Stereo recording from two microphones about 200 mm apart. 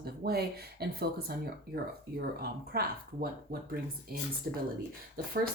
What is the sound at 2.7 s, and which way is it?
Speech, 50° right (ahead or behind).